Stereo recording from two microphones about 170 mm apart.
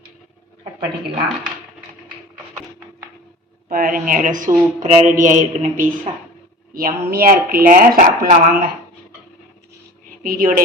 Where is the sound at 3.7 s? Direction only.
55° right (ahead or behind).